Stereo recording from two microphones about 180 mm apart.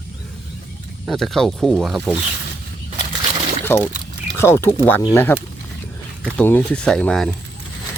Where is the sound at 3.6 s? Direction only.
15° left (ahead or behind).